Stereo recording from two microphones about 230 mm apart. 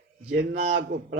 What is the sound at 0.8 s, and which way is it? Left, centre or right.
Speech, right.